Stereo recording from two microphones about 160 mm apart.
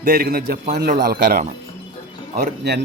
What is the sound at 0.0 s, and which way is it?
A man's voice, 75° right (ahead or behind).